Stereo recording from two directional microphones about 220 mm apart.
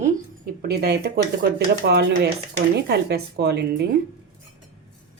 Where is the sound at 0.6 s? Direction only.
45° right (ahead or behind).